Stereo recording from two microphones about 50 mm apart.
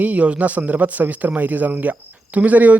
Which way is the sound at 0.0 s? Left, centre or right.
Right.